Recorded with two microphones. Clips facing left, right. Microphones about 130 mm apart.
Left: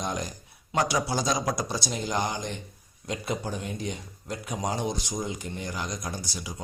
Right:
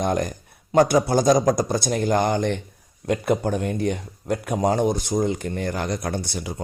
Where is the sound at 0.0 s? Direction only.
55° right (ahead or behind).